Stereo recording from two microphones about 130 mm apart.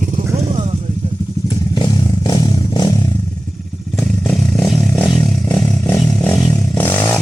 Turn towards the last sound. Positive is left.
turn(degrees=20)  # may be behind; listen again after turning